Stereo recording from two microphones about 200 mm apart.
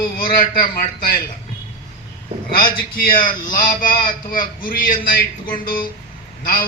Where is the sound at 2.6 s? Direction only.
45° left (ahead or behind).